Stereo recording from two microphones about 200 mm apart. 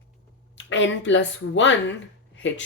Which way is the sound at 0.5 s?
65° left (ahead or behind).